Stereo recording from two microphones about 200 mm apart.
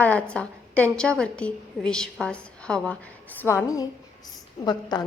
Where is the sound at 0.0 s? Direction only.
5° left (ahead or behind).